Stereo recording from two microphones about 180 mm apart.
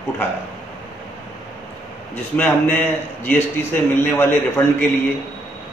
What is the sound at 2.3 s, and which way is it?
A man's voice, 10° left (ahead or behind).